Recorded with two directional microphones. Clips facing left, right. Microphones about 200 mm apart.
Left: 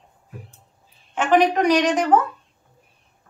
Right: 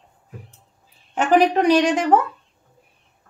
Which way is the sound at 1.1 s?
30° right (ahead or behind).